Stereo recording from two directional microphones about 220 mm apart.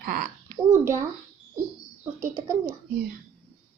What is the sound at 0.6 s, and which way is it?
Speech, 10° right (ahead or behind).